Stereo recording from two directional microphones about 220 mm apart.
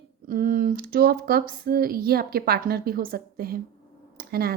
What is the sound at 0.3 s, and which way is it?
Speech, 40° right (ahead or behind).